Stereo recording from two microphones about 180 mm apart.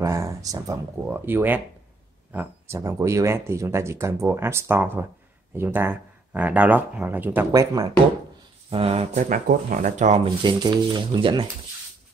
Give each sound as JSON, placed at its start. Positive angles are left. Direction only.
{"t": 0.0, "sound": "speech", "side_deg": -15}
{"t": 8.6, "sound": "speech", "side_deg": -35}
{"t": 9.3, "sound": "speech", "side_deg": -50}
{"t": 10.4, "sound": "speech", "side_deg": -25}